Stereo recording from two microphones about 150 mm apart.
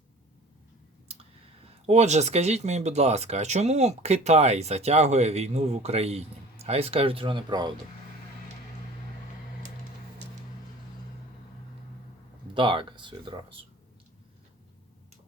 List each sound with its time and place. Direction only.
1.9 s speech: 50° right (ahead or behind); by 7.7 s 30° right (ahead or behind)
12.5 s speech: 30° right (ahead or behind)